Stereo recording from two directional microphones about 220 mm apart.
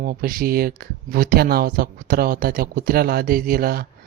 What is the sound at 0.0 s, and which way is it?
Speech, 40° right (ahead or behind).